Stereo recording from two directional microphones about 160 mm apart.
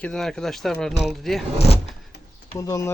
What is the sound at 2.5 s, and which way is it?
Speech, 20° left (ahead or behind).